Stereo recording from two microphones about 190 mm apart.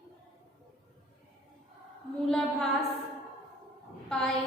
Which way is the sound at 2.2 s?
Centre (ahead or behind).